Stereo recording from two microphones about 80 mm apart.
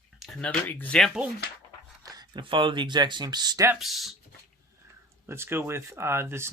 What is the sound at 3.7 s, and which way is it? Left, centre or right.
Speech, centre.